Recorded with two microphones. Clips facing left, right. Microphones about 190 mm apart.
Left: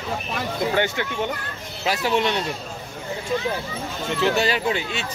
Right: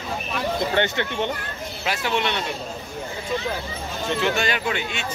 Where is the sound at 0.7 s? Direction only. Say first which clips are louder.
Even; 10° left (ahead or behind).